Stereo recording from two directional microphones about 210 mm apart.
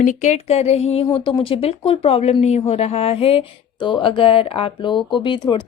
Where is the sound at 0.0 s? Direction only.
35° left (ahead or behind).